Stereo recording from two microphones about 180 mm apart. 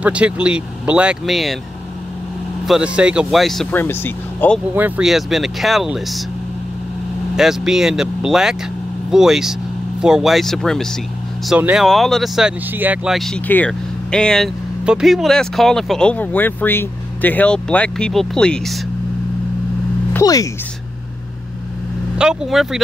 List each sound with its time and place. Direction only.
0.0 s speech: 5° right (ahead or behind)
2.6 s speech: 5° right (ahead or behind)
3.8 s speech: 10° left (ahead or behind)
4.7 s speech: 10° right (ahead or behind)
7.3 s speech: 5° right (ahead or behind)
20.1 s speech: 20° left (ahead or behind)
22.2 s speech: 5° right (ahead or behind)